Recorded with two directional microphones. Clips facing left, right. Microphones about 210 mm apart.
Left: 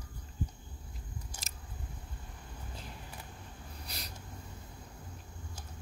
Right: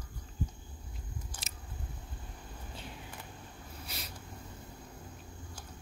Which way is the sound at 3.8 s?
Centre (ahead or behind).